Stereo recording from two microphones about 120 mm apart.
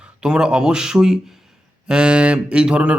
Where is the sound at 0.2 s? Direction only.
5° right (ahead or behind).